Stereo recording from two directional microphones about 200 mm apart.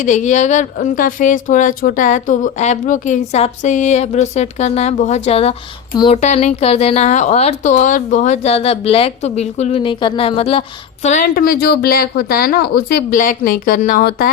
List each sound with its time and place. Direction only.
0.0 s speech: 35° left (ahead or behind)